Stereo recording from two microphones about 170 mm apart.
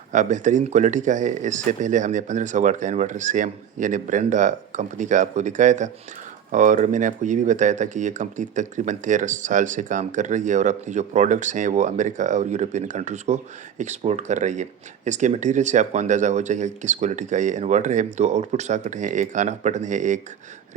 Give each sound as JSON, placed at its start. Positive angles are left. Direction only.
{"t": 0.1, "sound": "speech", "side_deg": -45}